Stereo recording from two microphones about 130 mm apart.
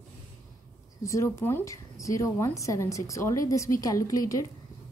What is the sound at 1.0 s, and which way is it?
A woman's voice, 25° left (ahead or behind).